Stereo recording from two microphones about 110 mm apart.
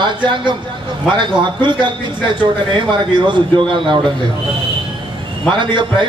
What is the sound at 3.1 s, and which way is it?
Speech, 45° right (ahead or behind).